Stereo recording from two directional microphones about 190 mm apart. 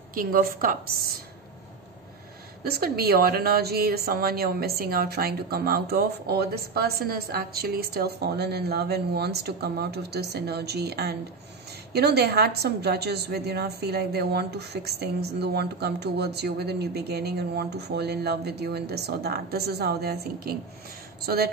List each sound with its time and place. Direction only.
0.1 s a woman's voice: 50° right (ahead or behind)
2.6 s a woman's voice: 55° right (ahead or behind)